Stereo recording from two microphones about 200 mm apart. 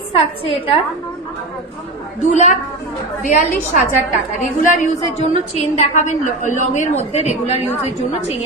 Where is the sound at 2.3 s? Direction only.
35° left (ahead or behind).